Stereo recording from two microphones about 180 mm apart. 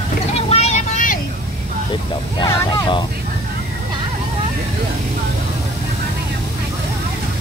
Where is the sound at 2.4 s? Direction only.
25° left (ahead or behind).